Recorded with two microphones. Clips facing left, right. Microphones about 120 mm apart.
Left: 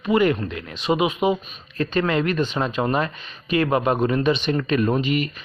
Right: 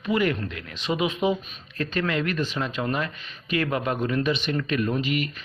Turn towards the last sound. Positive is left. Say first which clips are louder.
# left 4 dB
turn(degrees=30)  # may be behind; listen again after turning